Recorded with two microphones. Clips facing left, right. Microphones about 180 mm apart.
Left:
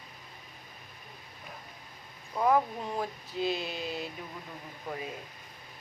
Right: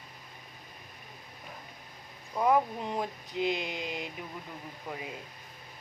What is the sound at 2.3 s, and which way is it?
Speech, 15° right (ahead or behind).